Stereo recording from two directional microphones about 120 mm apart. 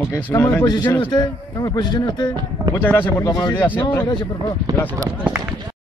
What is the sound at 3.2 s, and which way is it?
Speech, 30° left (ahead or behind).